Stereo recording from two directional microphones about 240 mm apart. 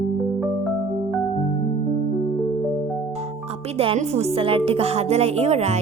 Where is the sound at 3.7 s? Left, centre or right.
Right.